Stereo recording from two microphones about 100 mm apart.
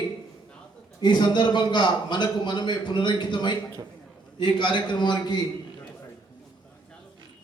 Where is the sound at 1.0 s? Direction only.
50° left (ahead or behind).